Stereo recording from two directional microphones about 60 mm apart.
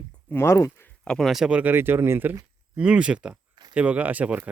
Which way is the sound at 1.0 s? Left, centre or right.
Centre.